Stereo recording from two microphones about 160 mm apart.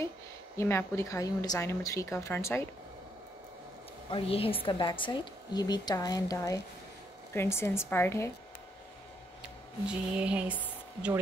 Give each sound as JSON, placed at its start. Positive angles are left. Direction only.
{"t": 0.6, "sound": "a woman's voice", "side_deg": 15}
{"t": 4.1, "sound": "a woman's voice", "side_deg": 35}
{"t": 9.8, "sound": "speech", "side_deg": -5}